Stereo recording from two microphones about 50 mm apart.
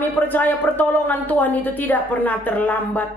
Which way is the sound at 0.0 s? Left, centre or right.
Left.